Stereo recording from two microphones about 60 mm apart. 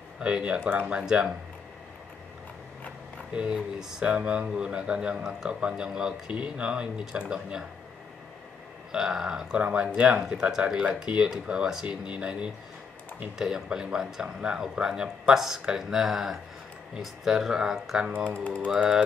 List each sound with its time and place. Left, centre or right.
0.2 s speech: centre
3.3 s speech: centre
8.9 s speech: centre